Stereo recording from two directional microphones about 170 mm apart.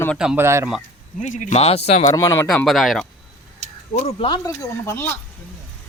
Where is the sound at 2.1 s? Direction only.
20° left (ahead or behind).